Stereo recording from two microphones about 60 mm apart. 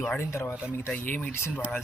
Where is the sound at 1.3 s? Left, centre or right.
Left.